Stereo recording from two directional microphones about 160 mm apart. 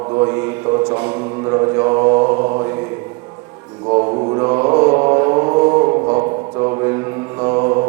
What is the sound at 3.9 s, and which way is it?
Mantra, 30° right (ahead or behind).